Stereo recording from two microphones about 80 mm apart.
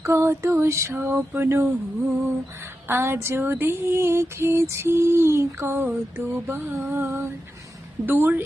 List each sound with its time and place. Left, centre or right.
0.0 s female singing: right
1.3 s speech: right
2.8 s female singing: right
8.0 s speech: right